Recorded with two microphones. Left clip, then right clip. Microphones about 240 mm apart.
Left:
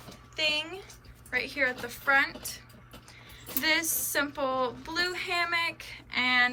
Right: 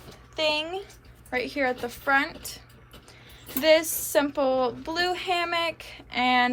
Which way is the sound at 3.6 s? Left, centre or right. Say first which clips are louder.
Right 7 dB; centre.